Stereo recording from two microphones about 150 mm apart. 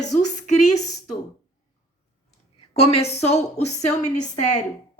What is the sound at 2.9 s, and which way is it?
Speech, 45° left (ahead or behind).